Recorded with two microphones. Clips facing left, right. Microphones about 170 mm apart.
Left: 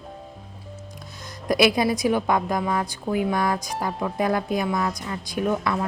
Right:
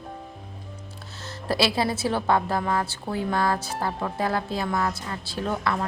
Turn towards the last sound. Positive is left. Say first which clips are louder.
# left 3 dB
turn(degrees=15)  # may be behind; listen again after turning